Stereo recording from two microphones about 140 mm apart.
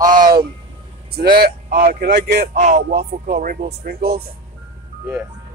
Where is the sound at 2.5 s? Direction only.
65° right (ahead or behind).